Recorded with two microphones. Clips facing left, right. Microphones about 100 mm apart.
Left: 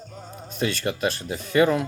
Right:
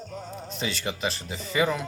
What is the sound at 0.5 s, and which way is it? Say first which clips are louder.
Speech: left 6 dB; 50° left (ahead or behind).